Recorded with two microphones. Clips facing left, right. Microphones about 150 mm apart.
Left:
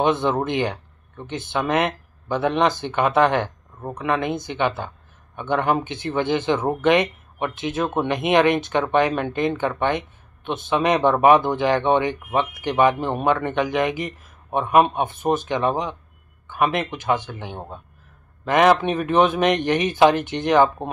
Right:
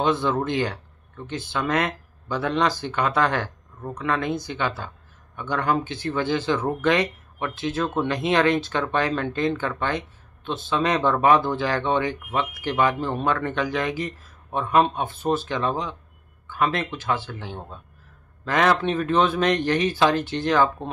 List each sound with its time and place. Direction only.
0.0 s speech: 20° left (ahead or behind)